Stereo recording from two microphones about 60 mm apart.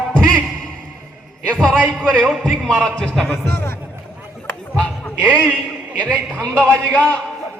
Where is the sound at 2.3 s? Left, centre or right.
Centre.